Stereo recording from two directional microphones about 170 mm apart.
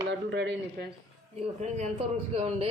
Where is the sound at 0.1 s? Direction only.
90° right.